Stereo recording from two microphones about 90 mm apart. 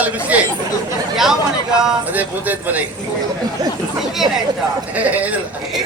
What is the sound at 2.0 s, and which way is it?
Speech, 20° right (ahead or behind).